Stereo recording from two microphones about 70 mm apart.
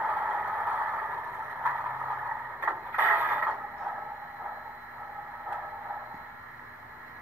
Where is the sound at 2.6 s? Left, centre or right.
Right.